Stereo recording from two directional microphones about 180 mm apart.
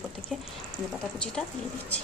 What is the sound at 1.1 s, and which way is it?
Speech, 5° left (ahead or behind).